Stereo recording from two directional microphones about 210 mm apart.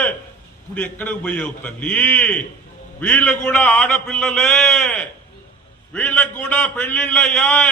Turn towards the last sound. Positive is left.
turn(degrees=5)  # may be behind; listen again after turning